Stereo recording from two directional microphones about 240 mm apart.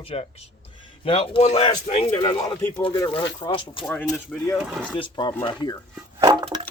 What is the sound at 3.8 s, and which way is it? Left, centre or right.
Speech, centre.